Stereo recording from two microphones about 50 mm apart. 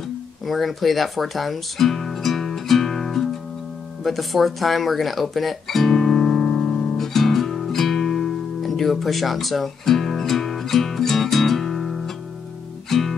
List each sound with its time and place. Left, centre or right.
0.5 s guitar: centre
4.0 s music: centre